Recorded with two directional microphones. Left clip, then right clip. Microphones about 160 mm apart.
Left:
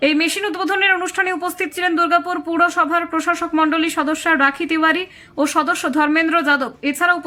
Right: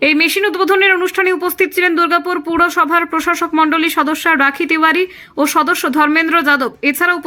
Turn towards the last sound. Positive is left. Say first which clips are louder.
# right 3 dB
turn(degrees=-20)  # may be behind; listen again after turning